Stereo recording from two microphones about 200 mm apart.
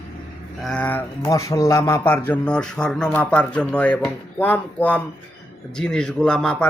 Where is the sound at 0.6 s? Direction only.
5° left (ahead or behind).